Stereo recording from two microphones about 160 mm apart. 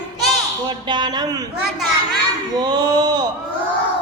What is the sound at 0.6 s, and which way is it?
Speech, 25° right (ahead or behind).